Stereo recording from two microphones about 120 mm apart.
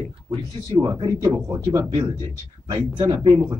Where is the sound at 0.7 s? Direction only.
30° right (ahead or behind).